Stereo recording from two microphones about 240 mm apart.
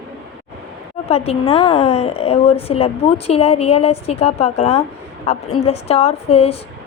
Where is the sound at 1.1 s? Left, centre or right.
Left.